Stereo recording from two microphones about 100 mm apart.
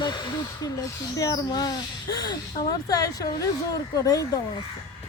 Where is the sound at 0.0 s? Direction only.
50° left (ahead or behind).